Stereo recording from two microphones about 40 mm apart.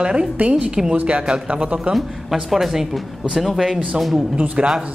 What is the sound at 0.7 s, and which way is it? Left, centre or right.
Speech, centre.